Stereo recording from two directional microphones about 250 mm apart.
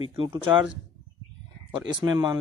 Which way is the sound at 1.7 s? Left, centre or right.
Centre.